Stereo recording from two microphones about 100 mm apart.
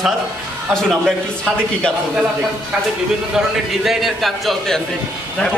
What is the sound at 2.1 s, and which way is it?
A man's voice, 10° right (ahead or behind).